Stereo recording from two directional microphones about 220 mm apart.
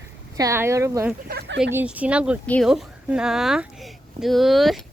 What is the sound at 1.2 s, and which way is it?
Speech, 50° right (ahead or behind).